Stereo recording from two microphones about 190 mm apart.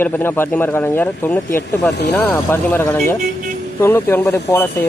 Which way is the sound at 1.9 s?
60° left (ahead or behind).